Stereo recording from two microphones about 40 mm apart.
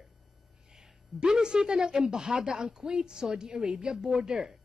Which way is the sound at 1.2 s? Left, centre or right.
Centre.